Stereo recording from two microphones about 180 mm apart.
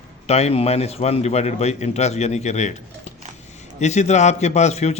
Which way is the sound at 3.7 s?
40° left (ahead or behind).